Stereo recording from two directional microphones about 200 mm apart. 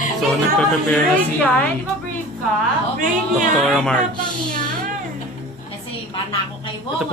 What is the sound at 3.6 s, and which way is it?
Speech, centre (ahead or behind).